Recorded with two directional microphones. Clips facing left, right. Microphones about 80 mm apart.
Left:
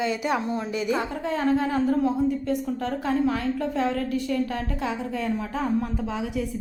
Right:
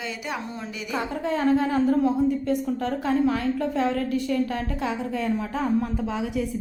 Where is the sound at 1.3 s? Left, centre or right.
Centre.